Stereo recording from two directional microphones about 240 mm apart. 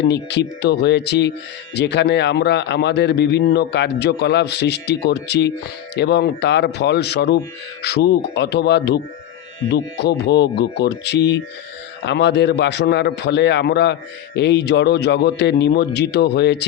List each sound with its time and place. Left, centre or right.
0.0 s a man's voice: left